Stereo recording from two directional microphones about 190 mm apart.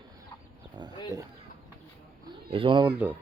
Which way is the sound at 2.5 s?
25° right (ahead or behind).